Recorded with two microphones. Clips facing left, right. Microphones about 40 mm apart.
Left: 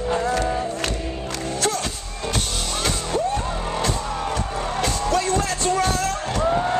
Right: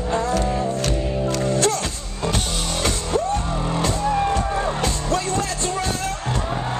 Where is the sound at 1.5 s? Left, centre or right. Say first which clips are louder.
Right 2 dB; right.